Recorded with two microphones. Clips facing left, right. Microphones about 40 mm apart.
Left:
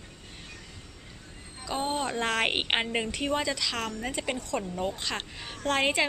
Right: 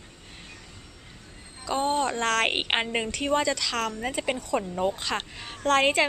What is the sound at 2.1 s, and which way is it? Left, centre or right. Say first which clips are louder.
Speech: right 3 dB; centre.